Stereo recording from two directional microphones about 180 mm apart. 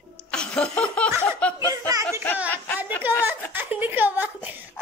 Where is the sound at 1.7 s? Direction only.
20° right (ahead or behind).